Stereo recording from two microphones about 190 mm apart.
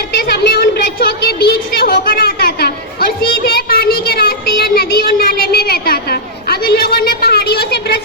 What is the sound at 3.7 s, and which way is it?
Child singing, 50° left (ahead or behind).